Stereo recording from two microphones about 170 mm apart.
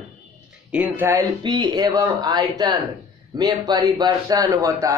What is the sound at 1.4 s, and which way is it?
Speech, 25° right (ahead or behind).